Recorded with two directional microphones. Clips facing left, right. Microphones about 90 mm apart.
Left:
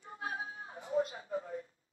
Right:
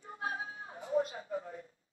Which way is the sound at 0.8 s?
30° right (ahead or behind).